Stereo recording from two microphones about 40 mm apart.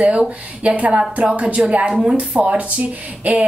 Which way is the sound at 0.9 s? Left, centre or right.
Right.